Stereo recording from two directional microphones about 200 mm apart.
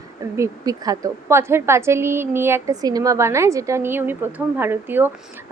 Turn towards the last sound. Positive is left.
turn(degrees=-10)  # may be behind; listen again after turning